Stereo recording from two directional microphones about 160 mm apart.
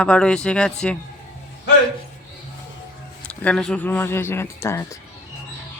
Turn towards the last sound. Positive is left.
turn(degrees=15)  # may be behind; listen again after turning